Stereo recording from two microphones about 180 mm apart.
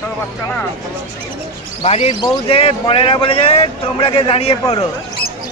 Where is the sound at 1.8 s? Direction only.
35° left (ahead or behind).